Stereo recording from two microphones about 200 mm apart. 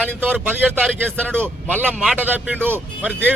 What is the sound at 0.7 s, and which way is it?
Speech, 5° left (ahead or behind).